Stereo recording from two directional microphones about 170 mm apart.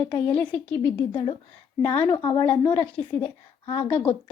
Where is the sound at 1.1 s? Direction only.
30° left (ahead or behind).